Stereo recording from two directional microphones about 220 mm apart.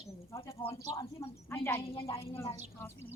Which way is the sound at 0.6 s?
25° left (ahead or behind).